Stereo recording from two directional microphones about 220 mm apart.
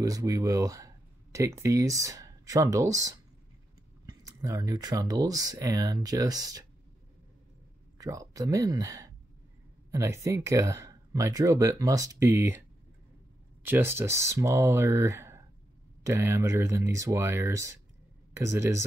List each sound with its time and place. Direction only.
0.0 s speech: 15° right (ahead or behind)
8.0 s speech: 15° right (ahead or behind)
13.7 s speech: 10° right (ahead or behind)